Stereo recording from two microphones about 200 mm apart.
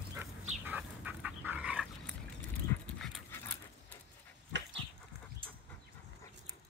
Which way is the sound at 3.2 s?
10° left (ahead or behind).